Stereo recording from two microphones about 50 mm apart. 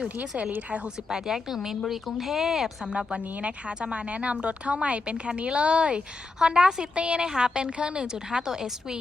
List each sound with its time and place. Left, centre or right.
1.1 s speech: centre
2.8 s a woman's voice: centre